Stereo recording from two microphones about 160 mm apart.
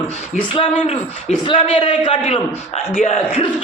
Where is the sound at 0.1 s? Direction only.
35° left (ahead or behind).